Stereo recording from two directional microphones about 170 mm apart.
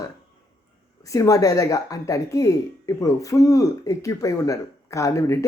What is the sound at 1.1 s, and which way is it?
Speech, 20° left (ahead or behind).